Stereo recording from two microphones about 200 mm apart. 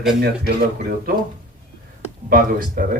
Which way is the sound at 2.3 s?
45° right (ahead or behind).